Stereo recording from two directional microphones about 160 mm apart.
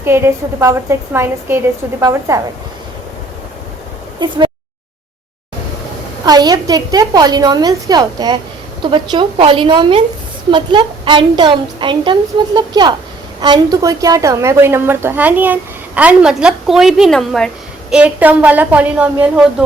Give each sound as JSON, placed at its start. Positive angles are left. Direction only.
{"t": 0.0, "sound": "a woman's voice", "side_deg": -15}
{"t": 4.2, "sound": "speech", "side_deg": -30}
{"t": 6.2, "sound": "a woman's voice", "side_deg": -25}
{"t": 17.9, "sound": "a woman's voice", "side_deg": -10}